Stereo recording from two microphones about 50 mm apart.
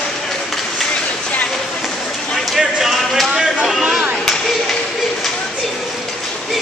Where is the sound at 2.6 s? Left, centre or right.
Centre.